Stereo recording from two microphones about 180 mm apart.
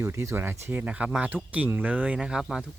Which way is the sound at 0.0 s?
15° right (ahead or behind).